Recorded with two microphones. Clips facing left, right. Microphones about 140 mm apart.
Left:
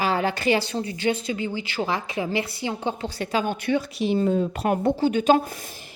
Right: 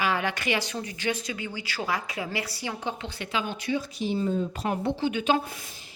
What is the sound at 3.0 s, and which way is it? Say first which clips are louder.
Speech: left 6 dB; 40° left (ahead or behind).